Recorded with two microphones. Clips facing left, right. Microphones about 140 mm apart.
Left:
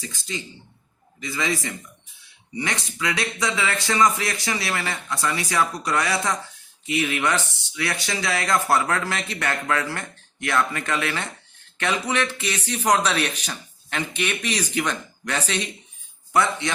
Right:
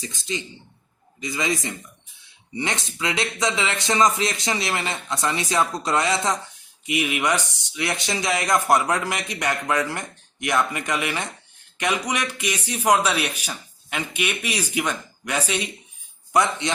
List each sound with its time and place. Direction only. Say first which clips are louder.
0.0 s speech: right 3 dB; 20° right (ahead or behind)